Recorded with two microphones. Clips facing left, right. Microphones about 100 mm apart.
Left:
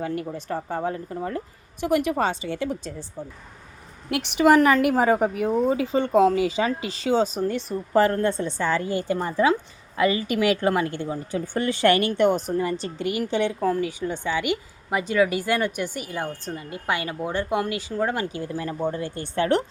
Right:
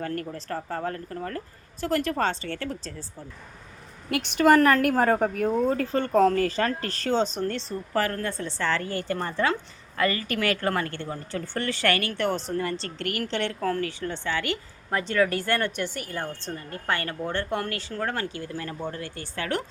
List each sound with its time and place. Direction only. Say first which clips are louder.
0.0 s a woman's voice: left 3 dB; 10° left (ahead or behind)
4.1 s speech: left 2 dB; 5° left (ahead or behind)
8.0 s a woman's voice: left 7 dB; 25° left (ahead or behind)